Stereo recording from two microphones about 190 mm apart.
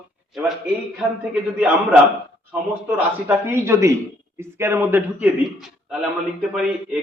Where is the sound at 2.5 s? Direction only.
10° right (ahead or behind).